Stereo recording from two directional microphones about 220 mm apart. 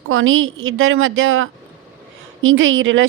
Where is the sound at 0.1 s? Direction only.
65° right (ahead or behind).